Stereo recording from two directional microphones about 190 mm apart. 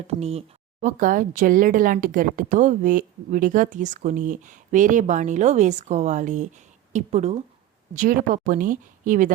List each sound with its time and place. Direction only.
0.1 s speech: 35° right (ahead or behind)